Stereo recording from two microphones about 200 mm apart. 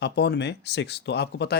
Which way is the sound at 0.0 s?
55° left (ahead or behind).